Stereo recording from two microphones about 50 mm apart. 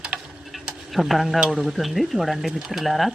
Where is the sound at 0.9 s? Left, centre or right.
Centre.